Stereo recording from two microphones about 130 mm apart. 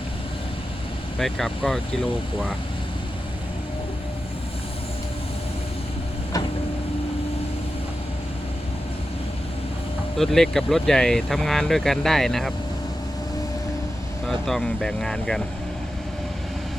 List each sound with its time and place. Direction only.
1.2 s speech: 5° left (ahead or behind)
10.2 s speech: 5° left (ahead or behind)
14.3 s speech: centre (ahead or behind)